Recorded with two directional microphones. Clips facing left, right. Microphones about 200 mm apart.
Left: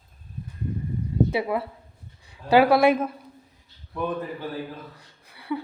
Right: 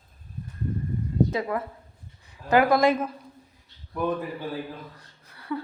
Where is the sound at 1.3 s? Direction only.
10° left (ahead or behind).